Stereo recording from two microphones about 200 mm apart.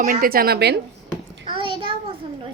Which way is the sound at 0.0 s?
45° right (ahead or behind).